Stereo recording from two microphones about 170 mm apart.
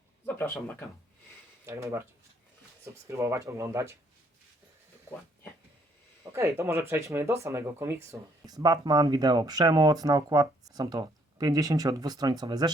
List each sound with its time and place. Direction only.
0.3 s speech: 10° left (ahead or behind)
1.6 s speech: 15° right (ahead or behind)
3.1 s speech: 20° right (ahead or behind)
6.3 s speech: 15° right (ahead or behind)